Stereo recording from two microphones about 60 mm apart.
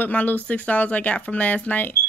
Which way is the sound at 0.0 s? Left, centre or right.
Left.